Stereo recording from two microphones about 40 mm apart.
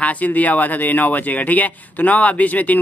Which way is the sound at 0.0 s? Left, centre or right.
Left.